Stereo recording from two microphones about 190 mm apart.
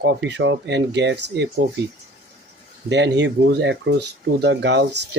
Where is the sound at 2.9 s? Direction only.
65° right (ahead or behind).